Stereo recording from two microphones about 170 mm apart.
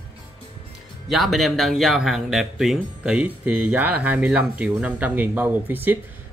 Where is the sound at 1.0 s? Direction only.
Centre (ahead or behind).